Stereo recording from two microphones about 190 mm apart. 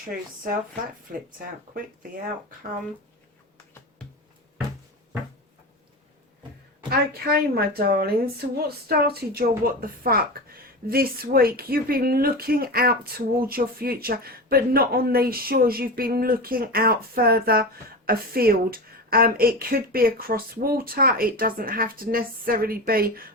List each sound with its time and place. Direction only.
6.9 s a woman's voice: 50° right (ahead or behind)